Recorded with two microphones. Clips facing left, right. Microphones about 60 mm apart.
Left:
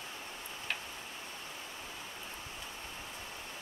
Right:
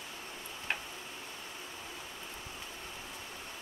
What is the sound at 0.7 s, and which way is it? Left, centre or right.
Tick-tock, right.